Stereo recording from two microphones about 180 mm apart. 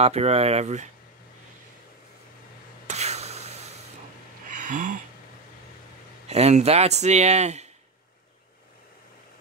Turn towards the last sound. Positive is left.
turn(degrees=-40)  # may be behind; listen again after turning